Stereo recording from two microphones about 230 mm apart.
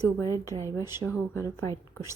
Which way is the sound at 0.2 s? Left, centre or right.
Centre.